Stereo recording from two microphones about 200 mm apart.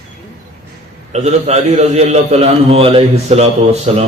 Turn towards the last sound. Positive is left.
turn(degrees=-30)  # may be behind; listen again after turning